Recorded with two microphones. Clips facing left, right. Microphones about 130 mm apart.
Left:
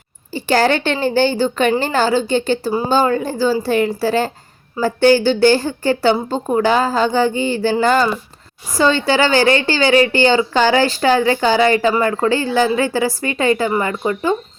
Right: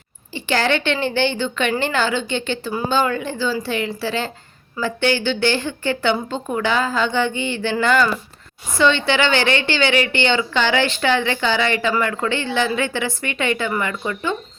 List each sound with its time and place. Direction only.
0.3 s a woman's voice: 40° left (ahead or behind)